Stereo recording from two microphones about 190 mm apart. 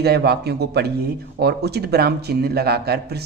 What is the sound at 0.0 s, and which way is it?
A man's voice, 60° right (ahead or behind).